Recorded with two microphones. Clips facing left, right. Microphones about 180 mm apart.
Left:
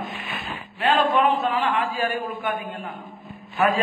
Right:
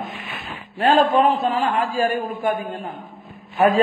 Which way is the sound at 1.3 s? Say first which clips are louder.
Right 2 dB; 30° right (ahead or behind).